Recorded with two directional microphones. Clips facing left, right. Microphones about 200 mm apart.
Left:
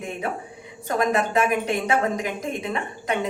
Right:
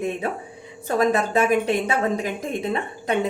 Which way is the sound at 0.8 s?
30° right (ahead or behind).